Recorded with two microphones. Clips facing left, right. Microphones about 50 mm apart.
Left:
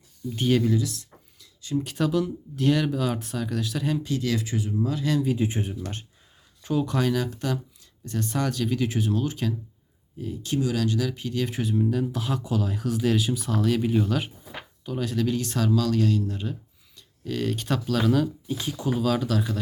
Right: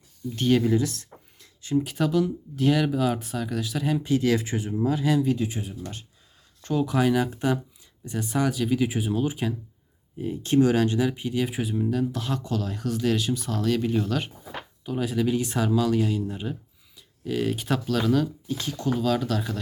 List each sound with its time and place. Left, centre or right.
0.3 s speech: centre
0.7 s a sound: right
1.7 s speech: centre
3.9 s speech: right
5.4 s speech: left
6.6 s speech: centre
7.0 s speech: centre
10.2 s speech: right; by 14.3 s centre
14.8 s speech: centre
18.4 s speech: centre